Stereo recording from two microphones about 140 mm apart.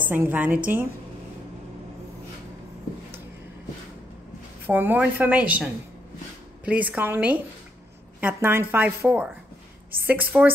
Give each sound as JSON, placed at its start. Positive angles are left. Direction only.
{"t": 0.0, "sound": "a woman's voice", "side_deg": -15}
{"t": 4.6, "sound": "a woman's voice", "side_deg": -15}